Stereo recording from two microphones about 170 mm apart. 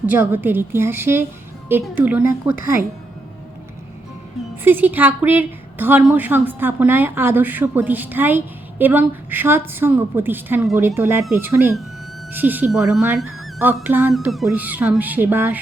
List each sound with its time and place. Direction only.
0.0 s a woman's voice: 10° right (ahead or behind)
4.6 s a woman's voice: 10° right (ahead or behind)
14.1 s a woman's voice: centre (ahead or behind)